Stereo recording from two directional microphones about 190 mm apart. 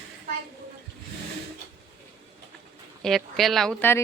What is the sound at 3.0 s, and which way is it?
Speech, centre (ahead or behind).